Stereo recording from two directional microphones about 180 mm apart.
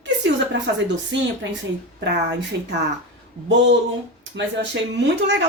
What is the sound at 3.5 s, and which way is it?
Speech, 90° right.